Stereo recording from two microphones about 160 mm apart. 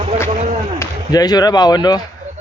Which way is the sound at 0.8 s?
25° left (ahead or behind).